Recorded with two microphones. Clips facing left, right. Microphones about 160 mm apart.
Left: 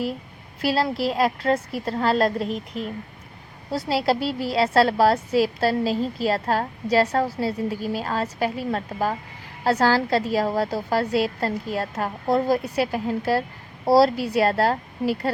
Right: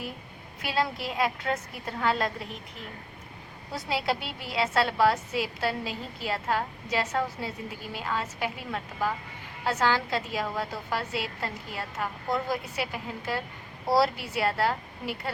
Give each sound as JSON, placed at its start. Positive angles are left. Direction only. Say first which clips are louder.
{"t": 0.6, "sound": "a woman's voice", "louder": "left 7 dB", "side_deg": 35}
{"t": 3.7, "sound": "a woman's voice", "louder": "left 7 dB", "side_deg": 35}